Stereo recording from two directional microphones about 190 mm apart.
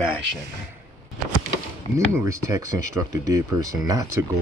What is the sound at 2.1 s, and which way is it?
Speech, 15° right (ahead or behind).